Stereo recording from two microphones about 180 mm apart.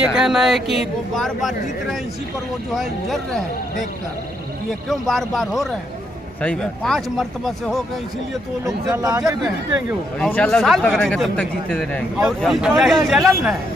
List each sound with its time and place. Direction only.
0.0 s speech: 5° right (ahead or behind)
2.7 s speech: centre (ahead or behind)
4.8 s speech: centre (ahead or behind)
8.6 s speech: 20° right (ahead or behind)
10.1 s speech: 5° left (ahead or behind)